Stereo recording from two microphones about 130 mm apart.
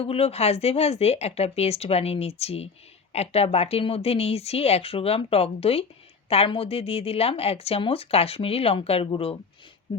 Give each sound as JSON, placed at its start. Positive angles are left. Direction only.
{"t": 0.0, "sound": "speech", "side_deg": 50}